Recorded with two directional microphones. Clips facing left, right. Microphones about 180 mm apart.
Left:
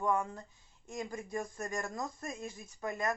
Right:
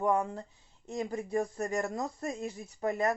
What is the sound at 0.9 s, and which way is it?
Speech, 30° right (ahead or behind).